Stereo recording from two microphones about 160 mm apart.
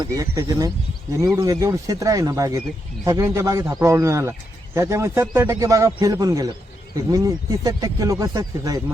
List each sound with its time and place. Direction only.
0.0 s a man's voice: 20° right (ahead or behind)